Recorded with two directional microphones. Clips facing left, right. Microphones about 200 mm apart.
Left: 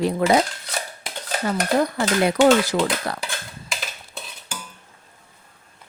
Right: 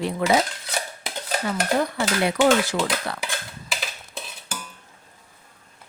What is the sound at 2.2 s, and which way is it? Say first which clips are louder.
Speech: left 3 dB; 40° left (ahead or behind).